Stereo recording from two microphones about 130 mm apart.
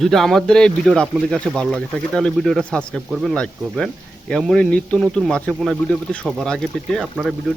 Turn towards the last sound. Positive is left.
turn(degrees=0)  # may be behind; listen again after turning